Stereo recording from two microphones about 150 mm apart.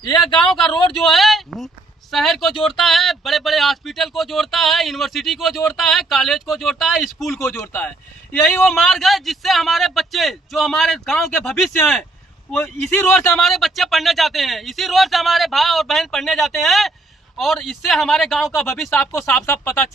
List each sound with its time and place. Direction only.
0.3 s speech: 5° left (ahead or behind)
7.3 s speech: 15° left (ahead or behind)
13.3 s speech: centre (ahead or behind)
19.1 s speech: 15° left (ahead or behind)